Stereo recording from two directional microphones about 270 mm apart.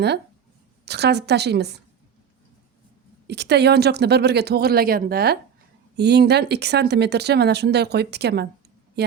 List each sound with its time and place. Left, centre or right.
0.9 s speech: right
3.2 s speech: right